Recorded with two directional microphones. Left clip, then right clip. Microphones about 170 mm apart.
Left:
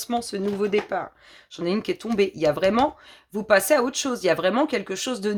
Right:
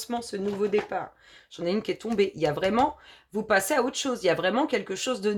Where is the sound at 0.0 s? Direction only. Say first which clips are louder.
Left 4 dB; 40° left (ahead or behind).